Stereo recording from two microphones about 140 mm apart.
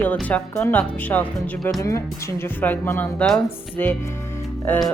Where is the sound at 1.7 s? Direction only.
20° left (ahead or behind).